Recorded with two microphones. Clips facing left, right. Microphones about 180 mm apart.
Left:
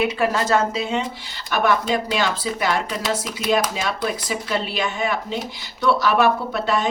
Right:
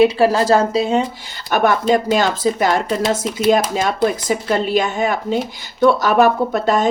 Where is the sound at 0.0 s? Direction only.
30° right (ahead or behind).